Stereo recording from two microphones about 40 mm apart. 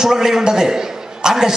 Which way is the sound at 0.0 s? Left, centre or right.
Centre.